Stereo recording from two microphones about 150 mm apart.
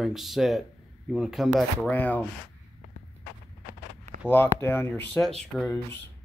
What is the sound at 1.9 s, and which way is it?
Speech, 10° left (ahead or behind).